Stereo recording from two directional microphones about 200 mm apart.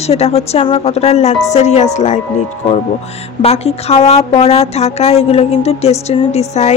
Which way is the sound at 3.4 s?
30° left (ahead or behind).